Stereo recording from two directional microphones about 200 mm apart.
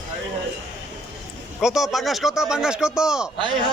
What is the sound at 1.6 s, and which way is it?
A man's voice, centre (ahead or behind).